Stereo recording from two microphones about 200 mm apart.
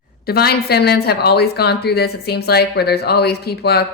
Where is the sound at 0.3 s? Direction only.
50° left (ahead or behind).